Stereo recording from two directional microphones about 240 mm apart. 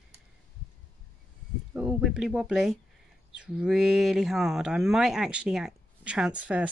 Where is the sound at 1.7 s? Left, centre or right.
Centre.